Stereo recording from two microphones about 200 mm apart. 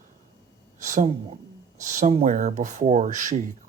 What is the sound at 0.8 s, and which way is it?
Speech, 40° right (ahead or behind).